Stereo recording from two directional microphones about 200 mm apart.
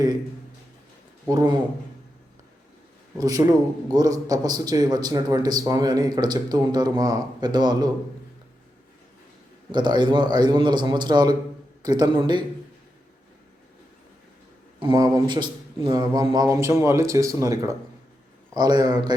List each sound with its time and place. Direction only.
3.2 s a man's voice: 20° right (ahead or behind)
9.7 s a man's voice: 20° right (ahead or behind)
14.8 s a man's voice: 20° right (ahead or behind)